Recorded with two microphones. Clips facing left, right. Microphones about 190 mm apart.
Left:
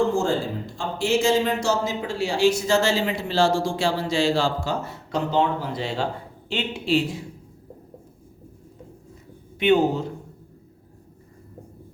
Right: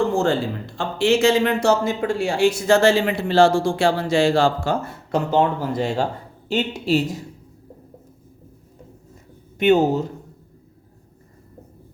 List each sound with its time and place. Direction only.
0.8 s a man's voice: 65° right (ahead or behind); by 7.2 s 40° right (ahead or behind)
9.6 s speech: 45° right (ahead or behind)